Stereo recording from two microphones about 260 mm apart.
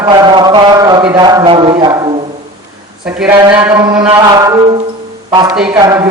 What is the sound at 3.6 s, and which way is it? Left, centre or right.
A man's voice, centre.